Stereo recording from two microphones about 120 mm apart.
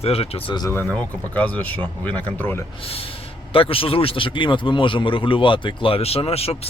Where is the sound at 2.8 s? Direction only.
50° left (ahead or behind).